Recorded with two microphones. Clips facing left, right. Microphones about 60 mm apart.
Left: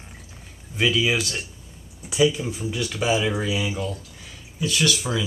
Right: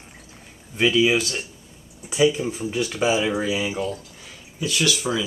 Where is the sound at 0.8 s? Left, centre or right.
Centre.